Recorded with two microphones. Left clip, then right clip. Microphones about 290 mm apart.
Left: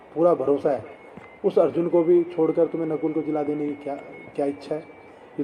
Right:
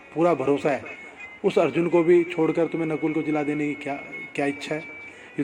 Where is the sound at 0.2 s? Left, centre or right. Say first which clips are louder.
Left 2 dB; right.